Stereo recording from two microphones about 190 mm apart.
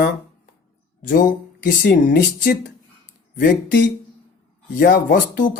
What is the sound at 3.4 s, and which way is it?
Speech, 70° left (ahead or behind).